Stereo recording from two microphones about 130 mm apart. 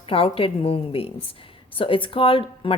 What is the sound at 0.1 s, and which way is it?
A woman's voice, 45° left (ahead or behind).